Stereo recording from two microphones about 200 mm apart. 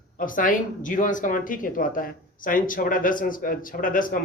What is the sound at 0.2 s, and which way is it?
Speech, 45° left (ahead or behind).